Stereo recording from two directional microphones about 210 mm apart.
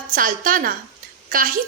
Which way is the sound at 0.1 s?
40° right (ahead or behind).